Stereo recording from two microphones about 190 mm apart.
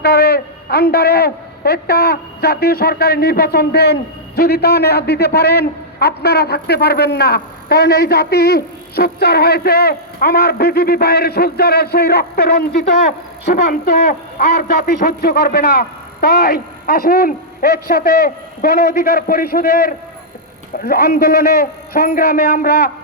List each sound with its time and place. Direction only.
0.0 s a man's voice: 55° left (ahead or behind)